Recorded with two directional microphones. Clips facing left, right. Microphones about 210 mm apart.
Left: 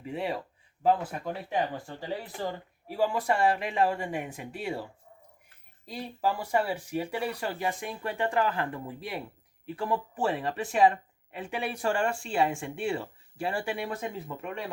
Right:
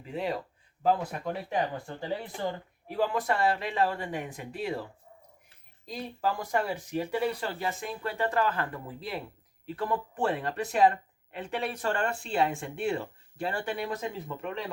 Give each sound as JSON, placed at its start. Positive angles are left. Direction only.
{"t": 0.1, "sound": "speech", "side_deg": 10}
{"t": 2.8, "sound": "speech", "side_deg": 10}